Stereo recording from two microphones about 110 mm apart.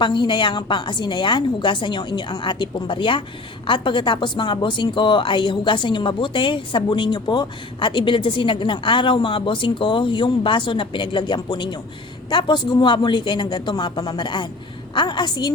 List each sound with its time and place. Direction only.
0.0 s a woman's voice: 45° left (ahead or behind)